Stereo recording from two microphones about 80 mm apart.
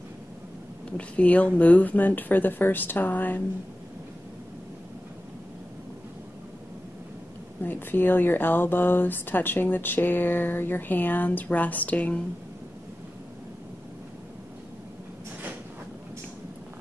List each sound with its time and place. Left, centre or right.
0.9 s a woman's voice: centre
7.6 s speech: left